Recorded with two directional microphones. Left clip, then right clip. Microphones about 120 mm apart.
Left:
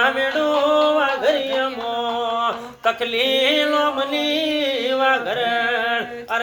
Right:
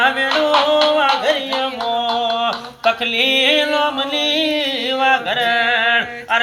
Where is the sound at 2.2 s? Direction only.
35° left (ahead or behind).